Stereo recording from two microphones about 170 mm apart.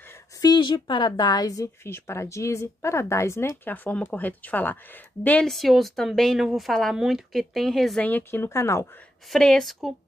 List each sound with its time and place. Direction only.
0.4 s a woman's voice: 25° left (ahead or behind)
9.3 s a woman's voice: centre (ahead or behind)